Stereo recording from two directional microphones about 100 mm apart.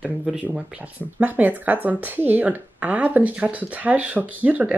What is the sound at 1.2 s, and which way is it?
Speech, 20° right (ahead or behind).